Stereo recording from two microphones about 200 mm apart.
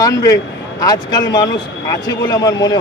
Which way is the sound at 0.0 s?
15° left (ahead or behind).